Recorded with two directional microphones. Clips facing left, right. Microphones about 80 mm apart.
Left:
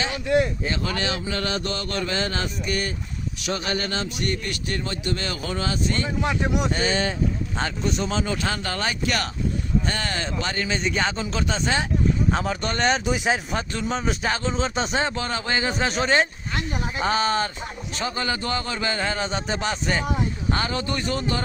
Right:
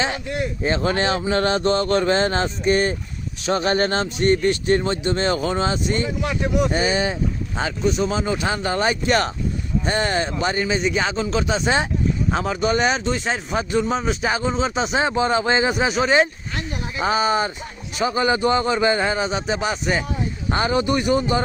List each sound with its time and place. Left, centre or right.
0.6 s speech: right
6.2 s speech: left
6.7 s speech: centre
8.2 s a man's voice: centre
10.7 s speech: centre
13.1 s speech: centre
13.5 s speech: centre
15.0 s a man's voice: centre
15.7 s a man's voice: centre
19.3 s speech: centre
20.5 s a man's voice: right